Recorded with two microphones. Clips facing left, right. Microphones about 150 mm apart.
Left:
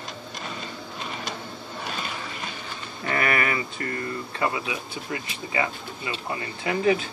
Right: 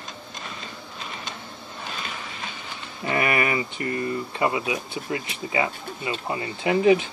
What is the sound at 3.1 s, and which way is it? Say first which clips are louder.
Speech: right 2 dB; 20° right (ahead or behind).